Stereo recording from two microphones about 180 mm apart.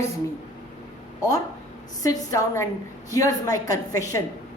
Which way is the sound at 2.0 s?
20° left (ahead or behind).